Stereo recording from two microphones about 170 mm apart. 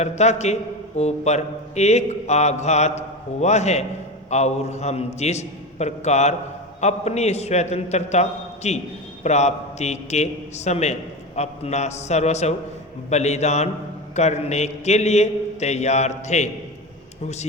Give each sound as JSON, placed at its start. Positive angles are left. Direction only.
{"t": 0.0, "sound": "a man's voice", "side_deg": 40}